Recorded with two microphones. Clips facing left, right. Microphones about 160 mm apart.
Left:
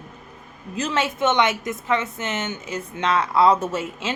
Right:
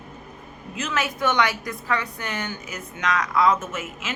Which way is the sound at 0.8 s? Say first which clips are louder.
Left 4 dB; 30° left (ahead or behind).